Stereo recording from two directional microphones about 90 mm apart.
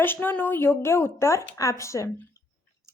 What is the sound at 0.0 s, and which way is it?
A woman's voice, 20° left (ahead or behind).